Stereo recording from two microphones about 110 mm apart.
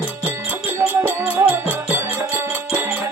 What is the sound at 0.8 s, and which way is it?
Music, 10° right (ahead or behind).